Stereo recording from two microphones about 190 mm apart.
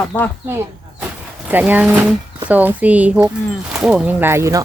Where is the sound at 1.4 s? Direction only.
10° right (ahead or behind).